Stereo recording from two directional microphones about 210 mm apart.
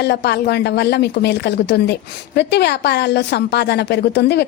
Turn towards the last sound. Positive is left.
turn(degrees=55)  # may be behind; listen again after turning